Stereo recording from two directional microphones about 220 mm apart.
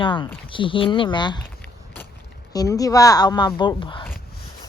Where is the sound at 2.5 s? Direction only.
15° left (ahead or behind).